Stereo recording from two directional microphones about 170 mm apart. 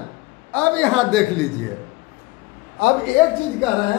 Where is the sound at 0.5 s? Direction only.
5° left (ahead or behind).